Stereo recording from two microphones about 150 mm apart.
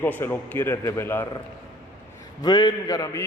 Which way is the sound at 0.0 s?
15° left (ahead or behind).